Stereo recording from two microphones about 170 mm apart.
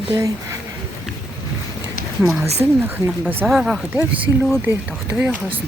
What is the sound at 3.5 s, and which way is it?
Speech, centre (ahead or behind).